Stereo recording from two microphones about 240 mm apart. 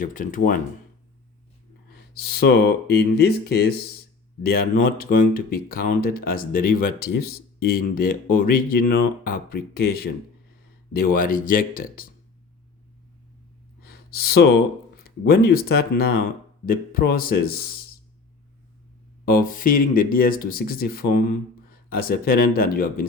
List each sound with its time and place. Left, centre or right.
0.0 s speech: left
2.1 s speech: left
13.8 s gasp: left
15.3 s speech: left
19.2 s speech: left